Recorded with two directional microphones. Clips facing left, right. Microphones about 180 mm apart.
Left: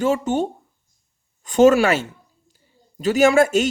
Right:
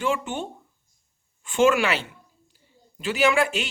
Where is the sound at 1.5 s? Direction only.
40° left (ahead or behind).